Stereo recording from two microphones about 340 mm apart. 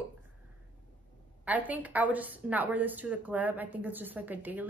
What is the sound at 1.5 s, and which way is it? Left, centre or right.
A woman's voice, centre.